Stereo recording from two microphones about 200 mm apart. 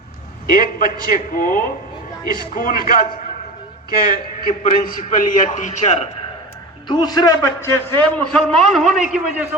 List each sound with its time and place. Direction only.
0.5 s a man's voice: 45° left (ahead or behind)
4.4 s a man's voice: 40° left (ahead or behind)
6.8 s a man's voice: 20° left (ahead or behind); by 9.6 s 5° right (ahead or behind)